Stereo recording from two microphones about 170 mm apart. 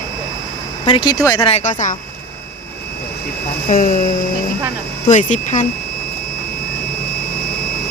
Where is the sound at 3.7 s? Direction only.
55° left (ahead or behind).